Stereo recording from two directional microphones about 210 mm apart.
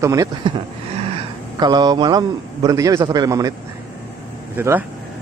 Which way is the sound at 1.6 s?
20° right (ahead or behind).